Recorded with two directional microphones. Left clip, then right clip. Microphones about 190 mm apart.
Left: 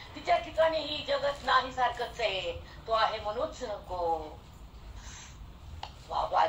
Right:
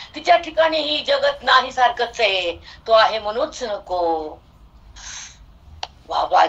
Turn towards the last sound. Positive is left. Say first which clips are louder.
# right 12 dB
turn(degrees=-50)  # may be behind; listen again after turning